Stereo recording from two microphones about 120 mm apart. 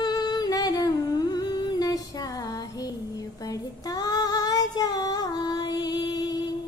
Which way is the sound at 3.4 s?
30° left (ahead or behind).